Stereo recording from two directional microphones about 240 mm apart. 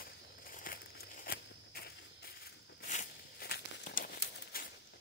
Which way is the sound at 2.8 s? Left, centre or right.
Left.